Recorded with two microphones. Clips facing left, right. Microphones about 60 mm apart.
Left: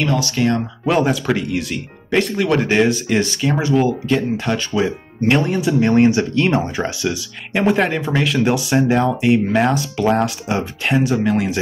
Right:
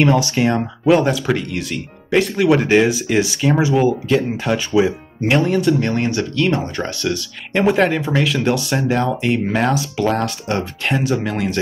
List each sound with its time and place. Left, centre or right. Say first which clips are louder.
0.0 s speech: right 3 dB; right
0.8 s speech: right 2 dB; centre; by 6.6 s left
6.8 s speech: even; centre